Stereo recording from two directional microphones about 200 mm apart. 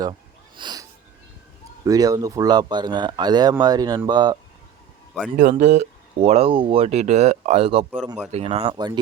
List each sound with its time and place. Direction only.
0.0 s wheeze: 25° right (ahead or behind)
1.8 s speech: 20° right (ahead or behind)
5.4 s speech: 40° right (ahead or behind)